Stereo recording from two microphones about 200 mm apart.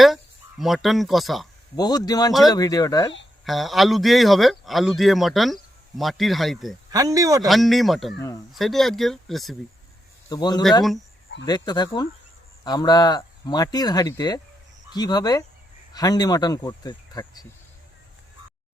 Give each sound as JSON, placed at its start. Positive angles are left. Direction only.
{"t": 0.6, "sound": "speech", "side_deg": 0}
{"t": 1.7, "sound": "speech", "side_deg": 20}
{"t": 3.4, "sound": "speech", "side_deg": 0}
{"t": 6.9, "sound": "speech", "side_deg": -15}
{"t": 7.4, "sound": "speech", "side_deg": 0}
{"t": 10.2, "sound": "speech", "side_deg": 20}